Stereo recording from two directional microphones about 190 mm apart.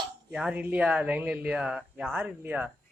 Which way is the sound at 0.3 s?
5° right (ahead or behind).